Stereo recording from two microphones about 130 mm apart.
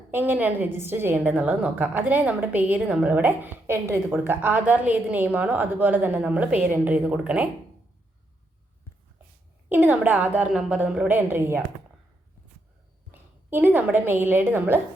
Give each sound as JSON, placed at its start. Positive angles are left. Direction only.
{"t": 0.1, "sound": "a woman's voice", "side_deg": -15}
{"t": 9.6, "sound": "a woman's voice", "side_deg": -15}
{"t": 13.1, "sound": "a woman's voice", "side_deg": -15}